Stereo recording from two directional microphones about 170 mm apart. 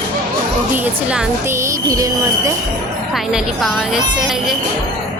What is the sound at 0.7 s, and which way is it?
Speech, 10° right (ahead or behind).